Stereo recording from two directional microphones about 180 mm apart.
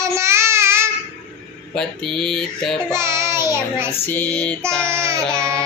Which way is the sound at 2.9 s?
15° right (ahead or behind).